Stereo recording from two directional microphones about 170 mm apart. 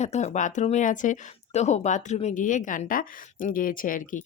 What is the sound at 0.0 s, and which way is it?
Speech, 40° left (ahead or behind).